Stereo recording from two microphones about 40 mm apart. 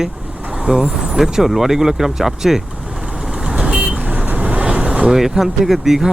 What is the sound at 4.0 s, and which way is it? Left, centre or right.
Vehicle, right.